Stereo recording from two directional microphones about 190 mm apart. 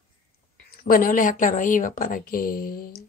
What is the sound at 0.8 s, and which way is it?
Speech, 50° left (ahead or behind).